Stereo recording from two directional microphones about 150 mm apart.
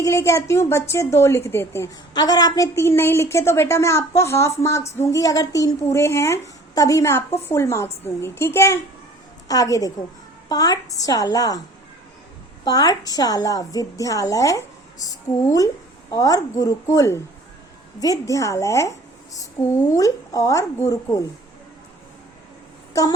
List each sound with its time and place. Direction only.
0.0 s a woman's voice: 20° left (ahead or behind)
12.6 s a woman's voice: 25° left (ahead or behind)